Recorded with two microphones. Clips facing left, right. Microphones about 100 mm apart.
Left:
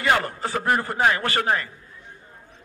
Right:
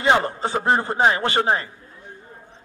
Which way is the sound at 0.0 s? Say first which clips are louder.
Right 3 dB; 25° right (ahead or behind).